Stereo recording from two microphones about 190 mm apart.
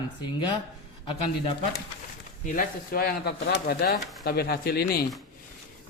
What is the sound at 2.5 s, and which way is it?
Speech, 50° left (ahead or behind).